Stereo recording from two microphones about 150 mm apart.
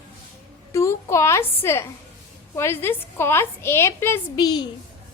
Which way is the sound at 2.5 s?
15° left (ahead or behind).